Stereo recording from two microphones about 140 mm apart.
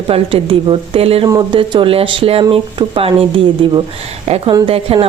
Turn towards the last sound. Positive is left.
turn(degrees=-40)  # may be behind; listen again after turning